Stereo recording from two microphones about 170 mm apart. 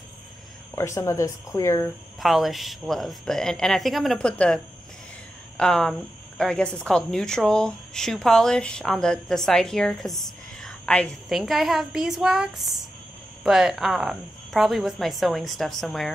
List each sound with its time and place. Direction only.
0.7 s speech: 15° left (ahead or behind)
2.1 s speech: centre (ahead or behind)
5.6 s speech: 5° left (ahead or behind)